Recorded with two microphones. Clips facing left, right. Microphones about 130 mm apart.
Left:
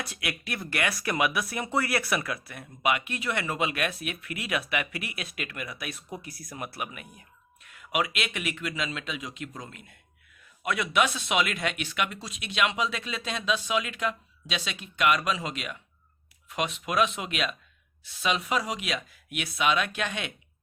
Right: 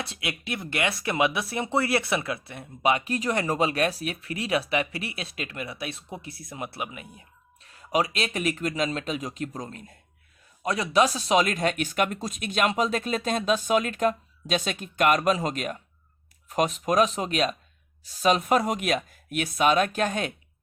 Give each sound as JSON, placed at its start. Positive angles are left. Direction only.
{"t": 0.0, "sound": "speech", "side_deg": -25}